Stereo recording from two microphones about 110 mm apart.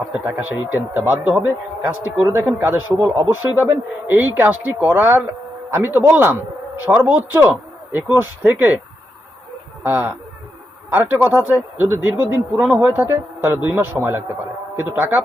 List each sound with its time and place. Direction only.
0.3 s a man's voice: 15° right (ahead or behind)
9.8 s a man's voice: 15° right (ahead or behind)